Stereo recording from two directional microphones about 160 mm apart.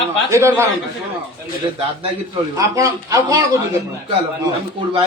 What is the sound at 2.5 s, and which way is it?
Speech, 20° right (ahead or behind).